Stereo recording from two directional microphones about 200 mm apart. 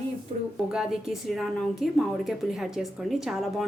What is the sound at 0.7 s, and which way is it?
A woman's voice, centre (ahead or behind).